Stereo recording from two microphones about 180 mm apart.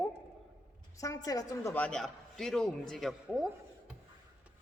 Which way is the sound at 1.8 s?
5° left (ahead or behind).